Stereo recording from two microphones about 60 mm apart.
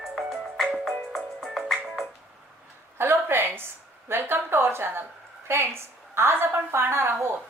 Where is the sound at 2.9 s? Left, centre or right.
Right.